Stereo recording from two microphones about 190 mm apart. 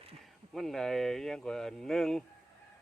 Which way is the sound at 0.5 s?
Centre (ahead or behind).